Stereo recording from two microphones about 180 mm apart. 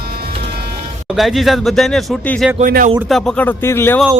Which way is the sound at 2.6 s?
50° right (ahead or behind).